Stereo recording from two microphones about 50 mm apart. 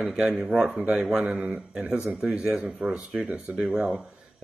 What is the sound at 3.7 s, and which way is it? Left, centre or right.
Speech, right.